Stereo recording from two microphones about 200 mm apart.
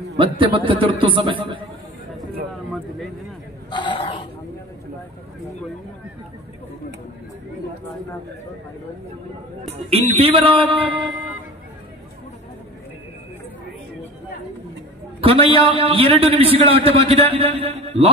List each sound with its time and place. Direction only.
0.2 s a man's voice: 25° right (ahead or behind)
3.7 s speech: 25° left (ahead or behind)
9.8 s a man's voice: 30° right (ahead or behind)
15.1 s a man's voice: 30° right (ahead or behind)